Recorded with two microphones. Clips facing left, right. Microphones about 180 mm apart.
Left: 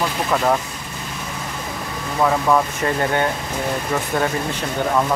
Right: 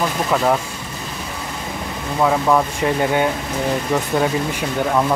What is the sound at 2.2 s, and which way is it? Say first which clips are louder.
Speech: right 1 dB; 10° right (ahead or behind).